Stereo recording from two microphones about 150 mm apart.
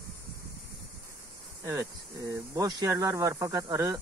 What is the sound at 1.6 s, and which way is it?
Speech, 20° right (ahead or behind).